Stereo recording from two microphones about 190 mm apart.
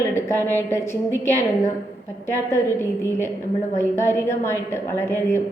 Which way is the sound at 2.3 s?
15° left (ahead or behind).